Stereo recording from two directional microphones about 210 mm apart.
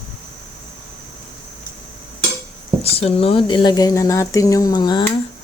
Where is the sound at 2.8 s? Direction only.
30° left (ahead or behind).